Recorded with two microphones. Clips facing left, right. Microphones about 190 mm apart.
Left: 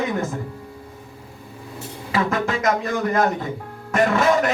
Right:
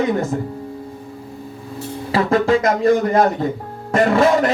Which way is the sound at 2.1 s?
35° right (ahead or behind).